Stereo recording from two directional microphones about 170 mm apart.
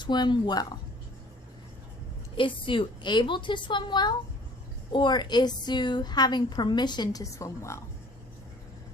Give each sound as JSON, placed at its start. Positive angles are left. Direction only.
{"t": 0.0, "sound": "a woman's voice", "side_deg": 25}
{"t": 2.3, "sound": "a woman's voice", "side_deg": 30}